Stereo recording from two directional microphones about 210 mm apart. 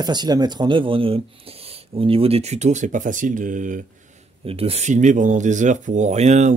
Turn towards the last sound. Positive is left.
turn(degrees=-35)  # may be behind; listen again after turning